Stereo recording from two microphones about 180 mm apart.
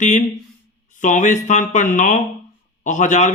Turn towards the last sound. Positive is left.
turn(degrees=40)  # may be behind; listen again after turning